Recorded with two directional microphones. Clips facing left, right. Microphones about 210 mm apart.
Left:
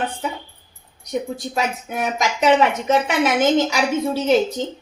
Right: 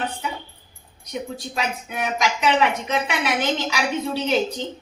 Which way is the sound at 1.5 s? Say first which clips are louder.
Left 3 dB; 45° left (ahead or behind).